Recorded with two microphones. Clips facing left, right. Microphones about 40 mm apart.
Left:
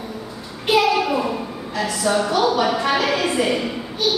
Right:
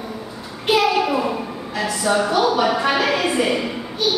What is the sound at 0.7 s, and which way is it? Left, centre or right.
A woman's voice, centre.